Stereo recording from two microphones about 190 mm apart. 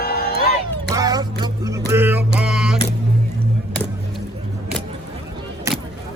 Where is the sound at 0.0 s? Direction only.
60° left (ahead or behind).